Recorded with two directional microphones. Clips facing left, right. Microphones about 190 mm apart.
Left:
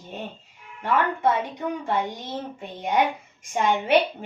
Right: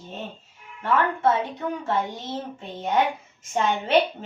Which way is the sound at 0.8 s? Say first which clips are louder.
Right 1 dB; 15° left (ahead or behind).